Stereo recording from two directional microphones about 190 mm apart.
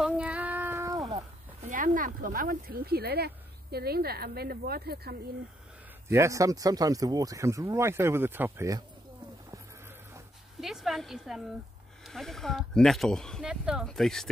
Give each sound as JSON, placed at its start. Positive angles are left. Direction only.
{"t": 0.0, "sound": "child singing", "side_deg": -5}
{"t": 1.6, "sound": "a woman's voice", "side_deg": -45}
{"t": 6.0, "sound": "speech", "side_deg": -15}
{"t": 9.5, "sound": "a sound", "side_deg": -15}
{"t": 10.6, "sound": "speech", "side_deg": 0}